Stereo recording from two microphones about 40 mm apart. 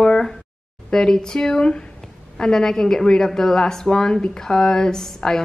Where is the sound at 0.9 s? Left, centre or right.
Centre.